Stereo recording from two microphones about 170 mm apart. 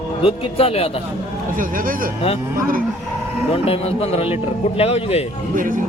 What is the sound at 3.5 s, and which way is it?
Speech, 35° left (ahead or behind).